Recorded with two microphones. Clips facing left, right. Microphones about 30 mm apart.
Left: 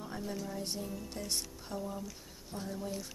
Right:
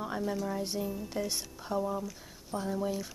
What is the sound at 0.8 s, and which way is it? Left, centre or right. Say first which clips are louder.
Speech: right 7 dB; right.